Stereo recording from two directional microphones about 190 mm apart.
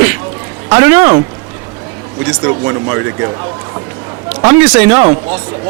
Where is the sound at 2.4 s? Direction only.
15° right (ahead or behind).